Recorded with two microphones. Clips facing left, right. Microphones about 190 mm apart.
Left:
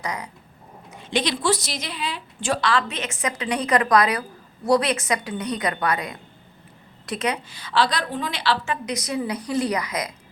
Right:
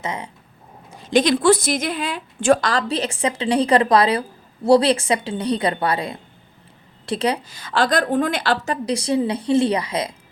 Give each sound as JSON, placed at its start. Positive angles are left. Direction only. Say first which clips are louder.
{"t": 0.0, "sound": "a woman's voice", "louder": "right 2 dB", "side_deg": -25}
{"t": 0.9, "sound": "a woman's voice", "louder": "right 8 dB", "side_deg": -35}